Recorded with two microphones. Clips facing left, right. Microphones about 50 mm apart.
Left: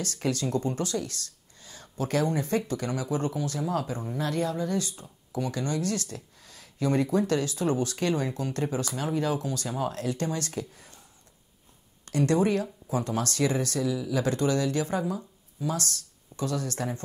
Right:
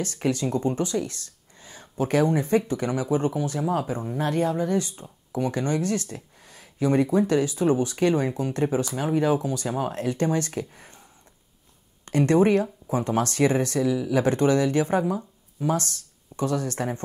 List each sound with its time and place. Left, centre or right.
0.0 s speech: right
4.2 s speech: right